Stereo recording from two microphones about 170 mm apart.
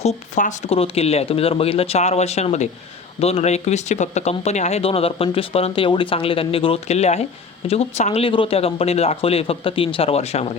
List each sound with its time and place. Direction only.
0.0 s speech: 45° left (ahead or behind)